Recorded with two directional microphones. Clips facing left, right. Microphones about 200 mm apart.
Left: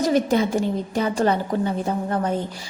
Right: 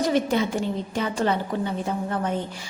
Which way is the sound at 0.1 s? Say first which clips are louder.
Left 3 dB; 40° left (ahead or behind).